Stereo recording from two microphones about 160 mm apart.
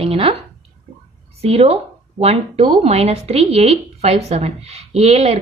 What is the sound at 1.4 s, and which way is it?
A woman's voice, 40° right (ahead or behind).